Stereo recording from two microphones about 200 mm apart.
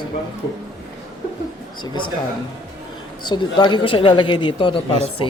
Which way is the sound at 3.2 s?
20° left (ahead or behind).